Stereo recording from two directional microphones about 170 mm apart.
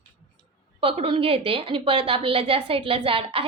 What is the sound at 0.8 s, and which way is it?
A woman's voice, 35° right (ahead or behind).